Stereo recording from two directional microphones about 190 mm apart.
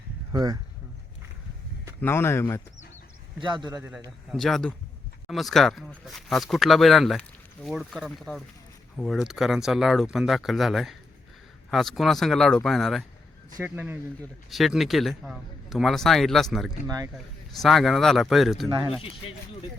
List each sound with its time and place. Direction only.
0.3 s a man's voice: 20° right (ahead or behind)
2.0 s speech: 10° left (ahead or behind)
3.4 s a man's voice: 25° right (ahead or behind)
4.3 s speech: centre (ahead or behind)
16.8 s a man's voice: 20° right (ahead or behind)
17.5 s speech: centre (ahead or behind)